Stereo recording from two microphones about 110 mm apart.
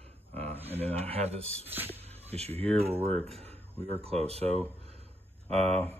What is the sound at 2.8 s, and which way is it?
Speech, 65° right (ahead or behind).